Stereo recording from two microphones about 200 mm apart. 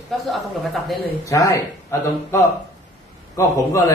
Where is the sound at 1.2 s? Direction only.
15° left (ahead or behind).